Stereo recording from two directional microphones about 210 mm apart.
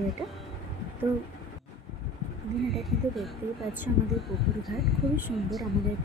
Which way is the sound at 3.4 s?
10° right (ahead or behind).